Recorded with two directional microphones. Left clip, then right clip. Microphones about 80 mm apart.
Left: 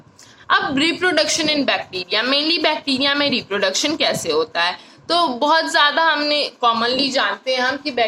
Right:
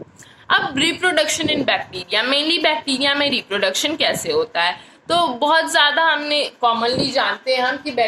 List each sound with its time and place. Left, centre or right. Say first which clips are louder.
0.4 s a woman's voice: even; left
5.0 s a woman's voice: even; left